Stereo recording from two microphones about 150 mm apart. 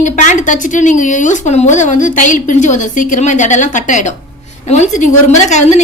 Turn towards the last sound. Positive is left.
turn(degrees=50)  # may be behind; listen again after turning